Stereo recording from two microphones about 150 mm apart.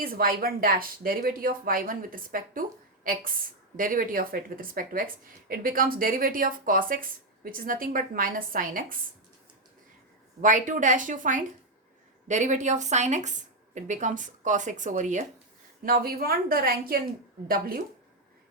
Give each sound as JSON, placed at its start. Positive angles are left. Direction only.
{"t": 0.0, "sound": "speech", "side_deg": -75}
{"t": 10.4, "sound": "a woman's voice", "side_deg": -60}
{"t": 15.8, "sound": "a woman's voice", "side_deg": -75}